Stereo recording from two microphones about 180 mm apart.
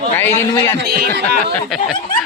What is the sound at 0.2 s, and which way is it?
Speech, 10° left (ahead or behind).